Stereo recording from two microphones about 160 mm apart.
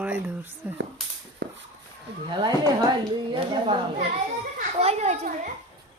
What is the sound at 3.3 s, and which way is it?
A child's voice, 35° right (ahead or behind).